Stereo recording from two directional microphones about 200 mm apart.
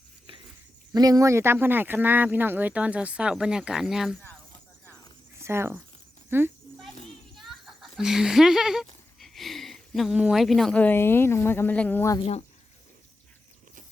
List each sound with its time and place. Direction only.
0.9 s speech: 20° right (ahead or behind); by 4.2 s centre (ahead or behind)
5.4 s speech: 10° right (ahead or behind)
7.3 s speech: centre (ahead or behind)